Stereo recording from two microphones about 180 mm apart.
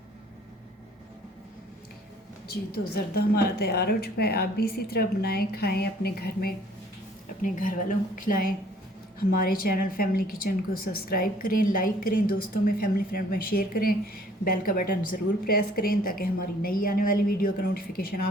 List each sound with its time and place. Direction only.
2.5 s a woman's voice: 60° left (ahead or behind)
7.4 s a woman's voice: 45° left (ahead or behind)